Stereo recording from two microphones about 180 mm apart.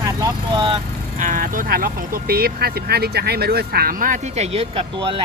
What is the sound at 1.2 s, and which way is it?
Speech, 50° right (ahead or behind).